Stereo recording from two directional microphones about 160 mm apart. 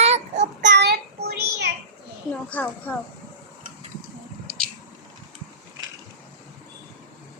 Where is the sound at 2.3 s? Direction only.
10° left (ahead or behind).